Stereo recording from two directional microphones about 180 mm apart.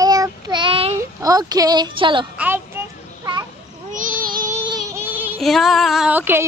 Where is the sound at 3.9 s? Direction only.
45° right (ahead or behind).